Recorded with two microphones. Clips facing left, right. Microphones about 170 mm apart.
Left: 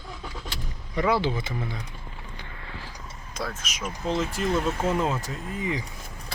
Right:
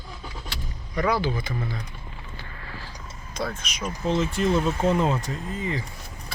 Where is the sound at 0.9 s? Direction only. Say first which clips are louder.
Even; 25° left (ahead or behind).